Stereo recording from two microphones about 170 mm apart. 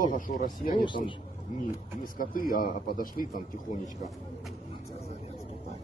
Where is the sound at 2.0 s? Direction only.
55° left (ahead or behind).